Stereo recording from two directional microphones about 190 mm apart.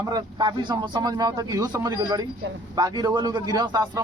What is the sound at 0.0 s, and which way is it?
A man's voice, 20° right (ahead or behind).